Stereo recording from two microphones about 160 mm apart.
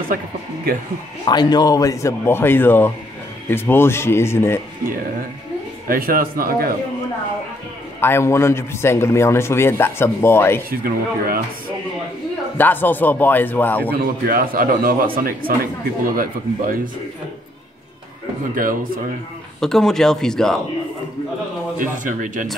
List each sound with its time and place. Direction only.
1.2 s a man's voice: 25° left (ahead or behind)
5.9 s a man's voice: 65° right (ahead or behind)
8.0 s a man's voice: 15° left (ahead or behind)
10.7 s a man's voice: 65° right (ahead or behind)
12.5 s a man's voice: 10° left (ahead or behind)
13.9 s a man's voice: 70° right (ahead or behind)
18.5 s a man's voice: 60° right (ahead or behind)
19.6 s speech: 5° left (ahead or behind)
21.7 s a man's voice: 55° right (ahead or behind)